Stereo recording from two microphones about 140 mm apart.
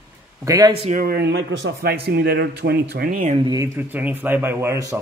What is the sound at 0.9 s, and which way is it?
Speech, 90° right.